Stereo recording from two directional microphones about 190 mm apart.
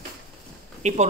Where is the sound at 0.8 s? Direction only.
40° right (ahead or behind).